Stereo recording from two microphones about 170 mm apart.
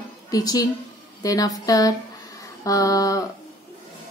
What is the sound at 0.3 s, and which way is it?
A woman's voice, 20° left (ahead or behind).